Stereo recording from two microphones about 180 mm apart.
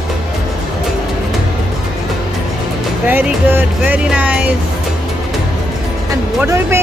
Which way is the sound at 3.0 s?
10° right (ahead or behind).